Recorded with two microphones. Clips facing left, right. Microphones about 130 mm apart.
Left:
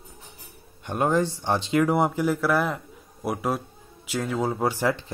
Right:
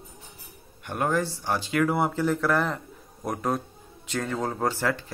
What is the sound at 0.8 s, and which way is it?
A man's voice, 20° left (ahead or behind).